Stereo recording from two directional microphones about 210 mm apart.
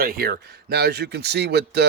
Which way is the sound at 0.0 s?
45° right (ahead or behind).